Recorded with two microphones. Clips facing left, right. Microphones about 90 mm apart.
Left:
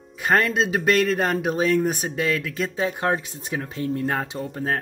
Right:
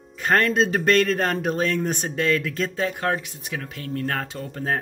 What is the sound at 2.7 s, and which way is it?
Speech, 15° left (ahead or behind).